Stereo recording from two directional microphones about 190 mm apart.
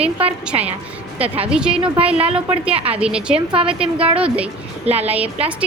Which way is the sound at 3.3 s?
30° right (ahead or behind).